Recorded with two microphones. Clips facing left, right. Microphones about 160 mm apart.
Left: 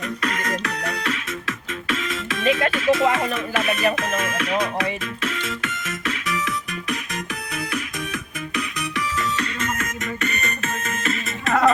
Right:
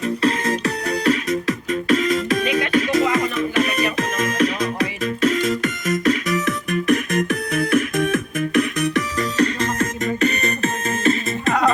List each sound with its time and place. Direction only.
0.0 s music: 30° right (ahead or behind)